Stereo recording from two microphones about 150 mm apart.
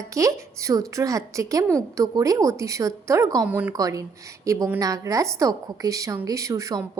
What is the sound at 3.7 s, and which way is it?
A woman's voice, 20° right (ahead or behind).